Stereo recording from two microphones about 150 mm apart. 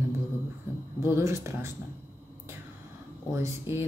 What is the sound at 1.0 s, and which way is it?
Speech, 20° right (ahead or behind).